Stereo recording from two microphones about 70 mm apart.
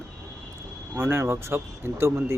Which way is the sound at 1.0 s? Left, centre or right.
Right.